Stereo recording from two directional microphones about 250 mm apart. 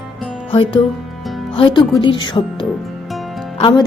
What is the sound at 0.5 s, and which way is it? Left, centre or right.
Speech, left.